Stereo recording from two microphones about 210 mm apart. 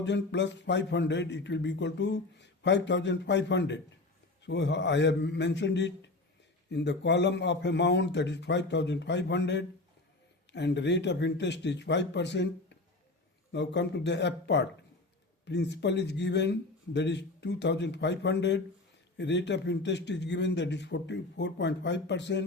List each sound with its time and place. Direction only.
0.0 s a man's voice: 55° left (ahead or behind)